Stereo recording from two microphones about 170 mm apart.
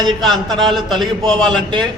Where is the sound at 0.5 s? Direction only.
Centre (ahead or behind).